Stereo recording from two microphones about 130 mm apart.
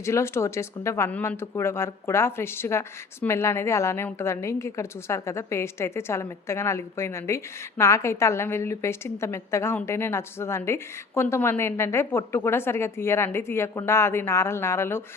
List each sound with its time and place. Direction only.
0.0 s speech: 20° left (ahead or behind)